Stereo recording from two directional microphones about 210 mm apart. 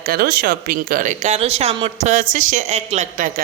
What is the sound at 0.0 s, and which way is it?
Speech, 45° right (ahead or behind).